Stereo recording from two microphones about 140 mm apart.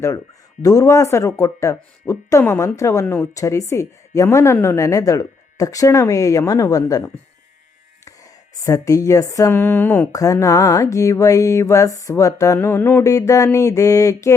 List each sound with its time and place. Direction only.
0.6 s speech: 25° left (ahead or behind)
10.1 s speech: 25° left (ahead or behind)